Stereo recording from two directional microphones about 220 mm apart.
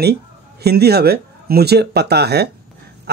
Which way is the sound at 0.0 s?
45° right (ahead or behind).